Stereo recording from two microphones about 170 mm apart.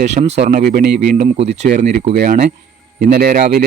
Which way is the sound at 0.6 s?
65° right (ahead or behind).